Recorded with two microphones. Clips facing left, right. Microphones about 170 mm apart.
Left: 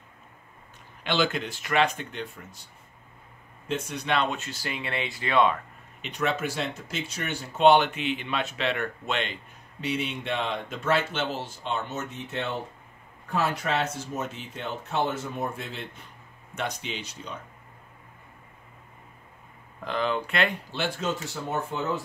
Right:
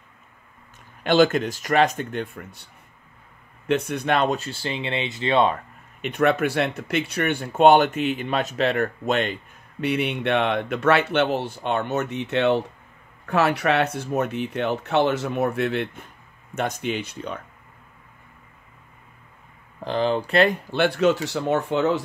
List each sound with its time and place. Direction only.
1.0 s speech: 45° right (ahead or behind); by 5.6 s 30° right (ahead or behind)
5.9 s speech: 55° right (ahead or behind)
16.5 s speech: 50° right (ahead or behind)
19.8 s speech: 30° right (ahead or behind)
20.7 s speech: 65° right (ahead or behind); by 22.0 s 80° right